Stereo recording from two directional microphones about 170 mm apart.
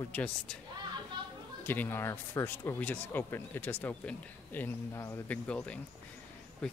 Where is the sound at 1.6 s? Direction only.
10° left (ahead or behind).